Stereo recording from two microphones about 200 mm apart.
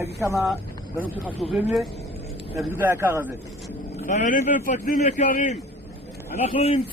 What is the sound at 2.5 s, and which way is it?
Speech, 10° right (ahead or behind).